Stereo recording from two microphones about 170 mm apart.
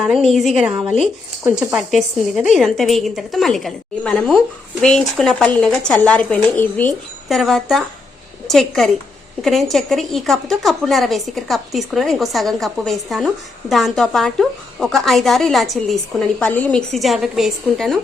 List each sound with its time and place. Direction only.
0.3 s a woman's voice: centre (ahead or behind)
0.8 s speech: 35° right (ahead or behind)
1.5 s a woman's voice: 5° right (ahead or behind)